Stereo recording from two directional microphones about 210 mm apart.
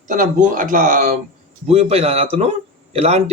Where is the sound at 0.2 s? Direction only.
40° right (ahead or behind).